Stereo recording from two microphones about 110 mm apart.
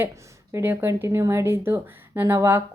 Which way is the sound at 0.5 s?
20° right (ahead or behind).